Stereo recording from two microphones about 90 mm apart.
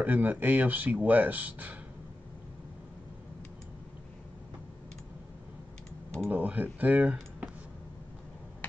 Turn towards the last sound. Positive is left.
turn(degrees=-20)  # may be behind; listen again after turning